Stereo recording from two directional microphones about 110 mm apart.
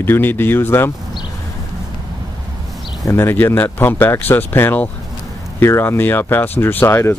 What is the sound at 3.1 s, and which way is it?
Speech, 20° left (ahead or behind).